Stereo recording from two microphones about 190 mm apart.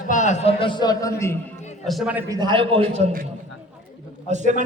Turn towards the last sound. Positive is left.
turn(degrees=-40)  # may be behind; listen again after turning